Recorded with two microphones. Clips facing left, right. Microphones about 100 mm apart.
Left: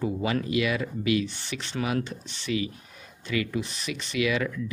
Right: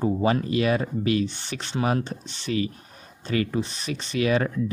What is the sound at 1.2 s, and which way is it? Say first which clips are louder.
Speech: right 5 dB; 35° left (ahead or behind).